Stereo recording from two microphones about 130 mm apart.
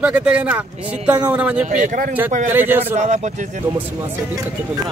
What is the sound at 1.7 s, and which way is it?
Speech, 75° right (ahead or behind).